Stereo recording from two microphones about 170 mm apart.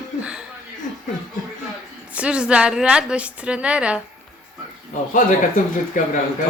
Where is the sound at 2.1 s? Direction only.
5° right (ahead or behind).